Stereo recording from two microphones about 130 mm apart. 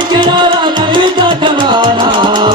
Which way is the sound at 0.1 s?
35° right (ahead or behind).